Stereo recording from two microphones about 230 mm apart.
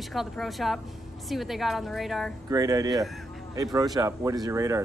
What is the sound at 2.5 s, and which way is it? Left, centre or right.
Speech, centre.